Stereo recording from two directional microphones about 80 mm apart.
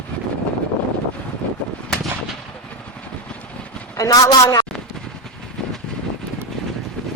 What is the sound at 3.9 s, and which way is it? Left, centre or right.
Speech, left.